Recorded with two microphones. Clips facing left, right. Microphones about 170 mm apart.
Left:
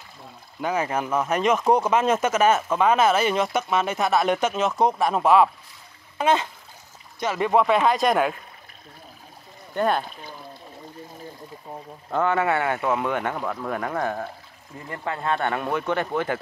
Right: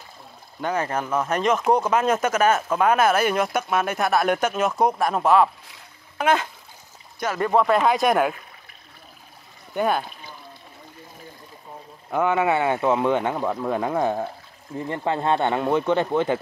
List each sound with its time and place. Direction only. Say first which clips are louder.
0.6 s speech: even; 5° left (ahead or behind)
9.8 s speech: even; 5° right (ahead or behind)
12.1 s speech: right 1 dB; 15° right (ahead or behind)